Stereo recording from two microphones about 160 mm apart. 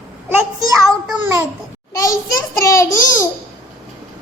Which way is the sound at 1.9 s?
20° left (ahead or behind).